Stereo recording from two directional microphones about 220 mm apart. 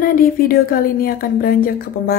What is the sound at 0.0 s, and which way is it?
A woman's voice, 40° left (ahead or behind).